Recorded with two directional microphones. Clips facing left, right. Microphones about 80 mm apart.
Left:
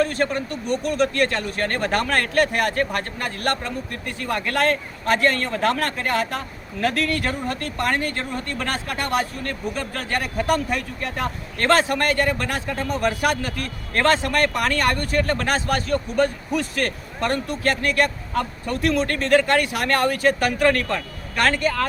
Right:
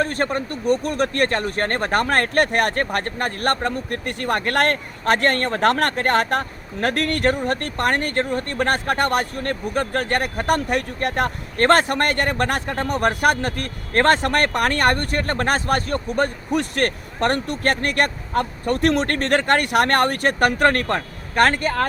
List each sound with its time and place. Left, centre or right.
0.0 s speech: right
11.5 s speech: right